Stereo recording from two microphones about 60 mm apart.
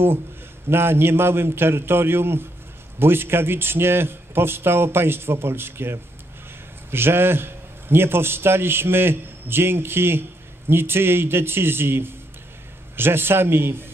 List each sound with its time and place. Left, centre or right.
0.7 s a man's voice: right